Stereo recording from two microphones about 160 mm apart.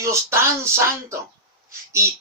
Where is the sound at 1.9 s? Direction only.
20° right (ahead or behind).